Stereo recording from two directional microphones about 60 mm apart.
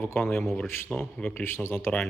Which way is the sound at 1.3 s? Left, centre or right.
Left.